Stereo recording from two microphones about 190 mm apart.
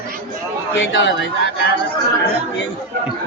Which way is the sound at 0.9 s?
70° left (ahead or behind).